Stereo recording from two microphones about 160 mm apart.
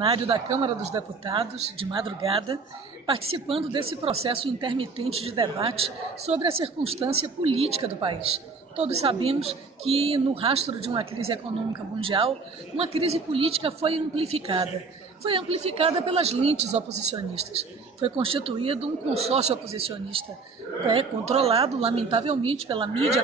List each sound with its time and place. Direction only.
0.0 s speech: 35° right (ahead or behind)